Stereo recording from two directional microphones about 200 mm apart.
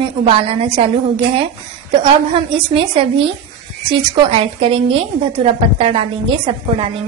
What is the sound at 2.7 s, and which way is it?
A woman's voice, 25° right (ahead or behind).